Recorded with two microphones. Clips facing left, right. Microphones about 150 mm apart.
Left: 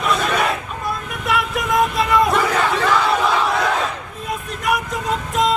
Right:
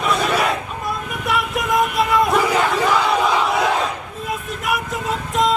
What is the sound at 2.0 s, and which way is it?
Crowd, centre (ahead or behind).